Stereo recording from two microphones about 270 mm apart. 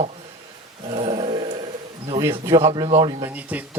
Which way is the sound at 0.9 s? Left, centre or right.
Centre.